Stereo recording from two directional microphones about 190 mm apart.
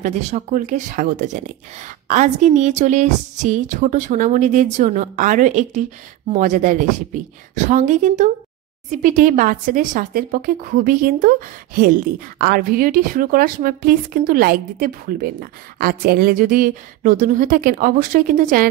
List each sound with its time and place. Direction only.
0.0 s speech: 35° right (ahead or behind)